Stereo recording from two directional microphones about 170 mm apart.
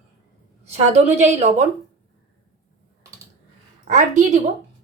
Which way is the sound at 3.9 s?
50° right (ahead or behind).